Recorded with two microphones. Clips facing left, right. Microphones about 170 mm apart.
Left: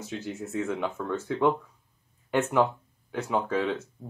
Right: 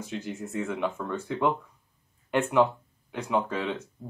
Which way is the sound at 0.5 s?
Centre (ahead or behind).